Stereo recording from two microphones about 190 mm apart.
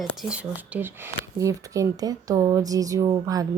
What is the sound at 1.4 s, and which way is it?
Speech, 15° right (ahead or behind).